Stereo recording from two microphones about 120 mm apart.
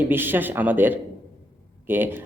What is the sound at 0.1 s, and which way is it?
Speech, 15° right (ahead or behind).